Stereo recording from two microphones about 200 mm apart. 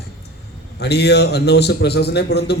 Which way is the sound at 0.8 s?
55° left (ahead or behind).